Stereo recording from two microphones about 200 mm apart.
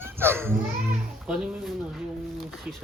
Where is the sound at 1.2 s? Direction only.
5° right (ahead or behind).